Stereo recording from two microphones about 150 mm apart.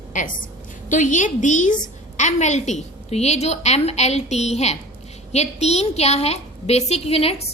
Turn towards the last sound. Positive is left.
turn(degrees=40)  # may be behind; listen again after turning